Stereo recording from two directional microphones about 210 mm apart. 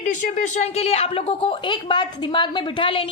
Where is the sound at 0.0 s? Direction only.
40° left (ahead or behind).